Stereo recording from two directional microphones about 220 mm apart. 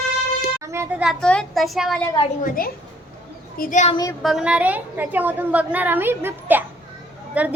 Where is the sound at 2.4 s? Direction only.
40° left (ahead or behind).